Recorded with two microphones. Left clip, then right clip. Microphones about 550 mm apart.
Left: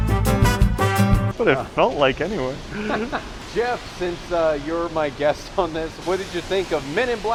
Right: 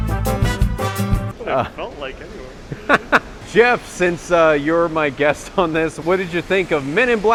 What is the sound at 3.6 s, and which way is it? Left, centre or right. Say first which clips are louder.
Speech: right 9 dB; right.